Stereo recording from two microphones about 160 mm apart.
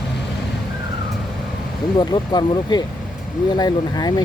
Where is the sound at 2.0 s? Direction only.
25° left (ahead or behind).